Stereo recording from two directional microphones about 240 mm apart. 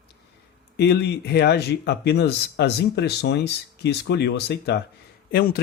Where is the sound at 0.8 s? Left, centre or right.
Left.